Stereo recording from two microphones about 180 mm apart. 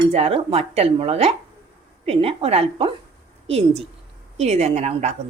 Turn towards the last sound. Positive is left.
turn(degrees=-40)  # may be behind; listen again after turning